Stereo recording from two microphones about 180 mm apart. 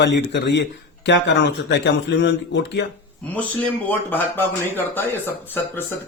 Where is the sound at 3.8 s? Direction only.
10° left (ahead or behind).